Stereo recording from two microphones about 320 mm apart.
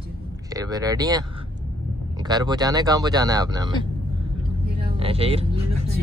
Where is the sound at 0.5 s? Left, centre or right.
Centre.